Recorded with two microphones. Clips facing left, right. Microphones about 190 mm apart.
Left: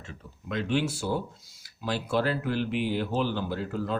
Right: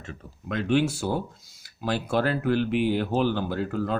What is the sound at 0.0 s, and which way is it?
Speech, 50° right (ahead or behind).